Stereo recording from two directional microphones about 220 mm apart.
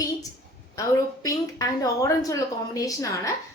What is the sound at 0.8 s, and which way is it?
A woman's voice, 15° left (ahead or behind).